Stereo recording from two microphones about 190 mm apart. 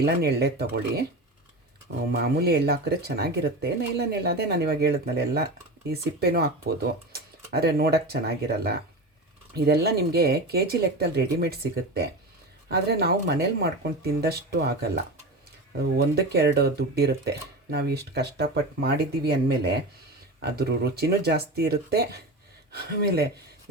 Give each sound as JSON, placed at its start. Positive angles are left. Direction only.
{"t": 0.0, "sound": "speech", "side_deg": -55}
{"t": 2.1, "sound": "speech", "side_deg": -55}
{"t": 16.0, "sound": "speech", "side_deg": -55}